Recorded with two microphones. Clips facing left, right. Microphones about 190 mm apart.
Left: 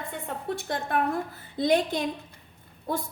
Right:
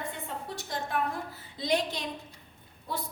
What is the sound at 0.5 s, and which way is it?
A woman's voice, 55° left (ahead or behind).